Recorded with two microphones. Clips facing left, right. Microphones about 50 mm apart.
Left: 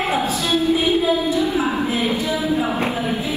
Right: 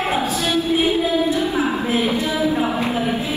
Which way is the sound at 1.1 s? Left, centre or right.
Right.